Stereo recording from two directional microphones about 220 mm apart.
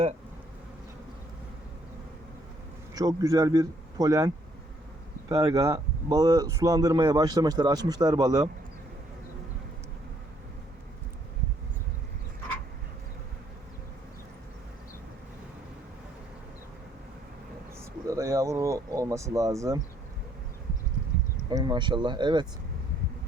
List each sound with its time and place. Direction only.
2.9 s a man's voice: 15° right (ahead or behind)
5.3 s speech: 15° right (ahead or behind)
18.1 s a sound: 15° right (ahead or behind)
21.5 s speech: 20° right (ahead or behind)